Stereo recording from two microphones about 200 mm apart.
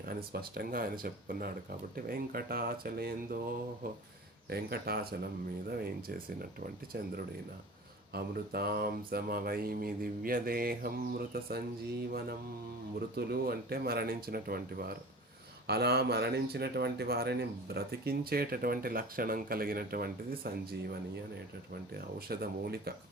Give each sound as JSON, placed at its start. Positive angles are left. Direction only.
{"t": 0.0, "sound": "speech", "side_deg": -45}
{"t": 4.4, "sound": "speech", "side_deg": -50}
{"t": 13.1, "sound": "speech", "side_deg": -50}
{"t": 22.3, "sound": "speech", "side_deg": -50}